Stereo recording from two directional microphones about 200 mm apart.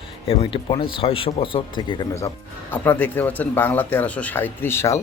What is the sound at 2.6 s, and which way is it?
Speech, 10° left (ahead or behind).